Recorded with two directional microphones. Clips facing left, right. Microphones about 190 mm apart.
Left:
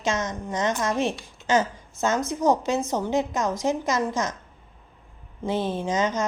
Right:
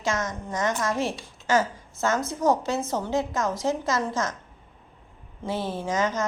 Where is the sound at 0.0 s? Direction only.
20° left (ahead or behind).